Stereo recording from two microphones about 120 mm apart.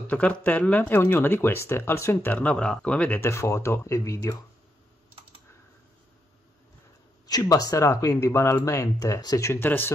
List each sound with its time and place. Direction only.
0.0 s speech: 10° left (ahead or behind)
7.2 s speech: 35° left (ahead or behind)
9.5 s speech: 15° left (ahead or behind)